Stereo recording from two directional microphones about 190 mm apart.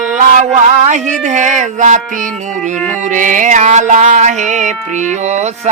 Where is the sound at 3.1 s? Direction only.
40° right (ahead or behind).